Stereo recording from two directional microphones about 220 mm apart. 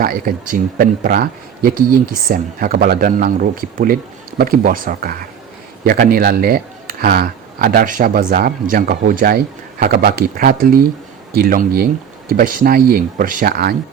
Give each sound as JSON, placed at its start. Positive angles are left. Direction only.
{"t": 0.0, "sound": "speech", "side_deg": -40}